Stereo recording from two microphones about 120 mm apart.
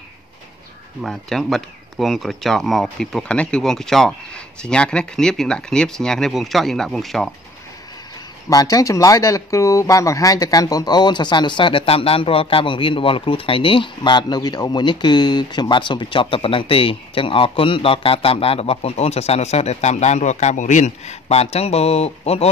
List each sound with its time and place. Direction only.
1.0 s speech: centre (ahead or behind)
8.5 s speech: 30° left (ahead or behind); by 22.5 s 60° left (ahead or behind)